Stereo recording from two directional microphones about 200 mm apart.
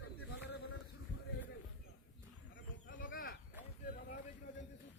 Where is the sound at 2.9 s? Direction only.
45° left (ahead or behind).